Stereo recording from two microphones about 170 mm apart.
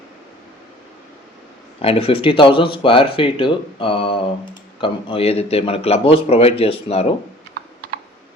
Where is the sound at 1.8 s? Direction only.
35° left (ahead or behind).